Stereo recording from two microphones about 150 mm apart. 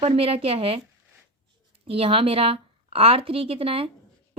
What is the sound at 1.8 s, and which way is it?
A woman's voice, 40° right (ahead or behind).